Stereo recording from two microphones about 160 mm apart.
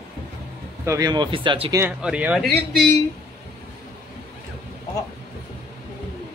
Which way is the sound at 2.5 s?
10° left (ahead or behind).